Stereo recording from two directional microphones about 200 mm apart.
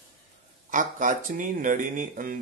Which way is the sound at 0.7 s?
40° right (ahead or behind).